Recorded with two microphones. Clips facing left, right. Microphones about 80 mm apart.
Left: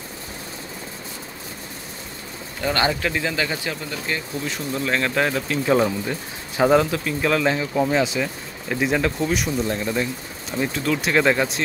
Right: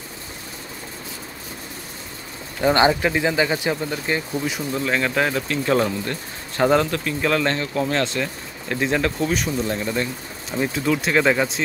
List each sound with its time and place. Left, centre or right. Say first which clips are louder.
2.6 s speech: right 5 dB; right
4.5 s speech: left 1 dB; centre